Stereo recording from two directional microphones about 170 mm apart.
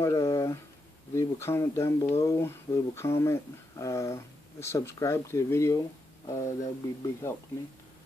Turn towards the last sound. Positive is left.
turn(degrees=15)  # may be behind; listen again after turning